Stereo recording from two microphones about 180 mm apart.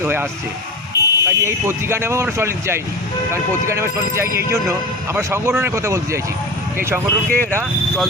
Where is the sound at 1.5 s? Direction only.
15° right (ahead or behind).